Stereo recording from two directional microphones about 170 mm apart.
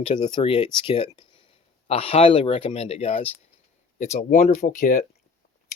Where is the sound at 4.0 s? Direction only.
50° left (ahead or behind).